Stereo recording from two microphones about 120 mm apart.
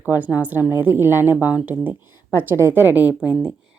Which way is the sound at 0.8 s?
20° right (ahead or behind).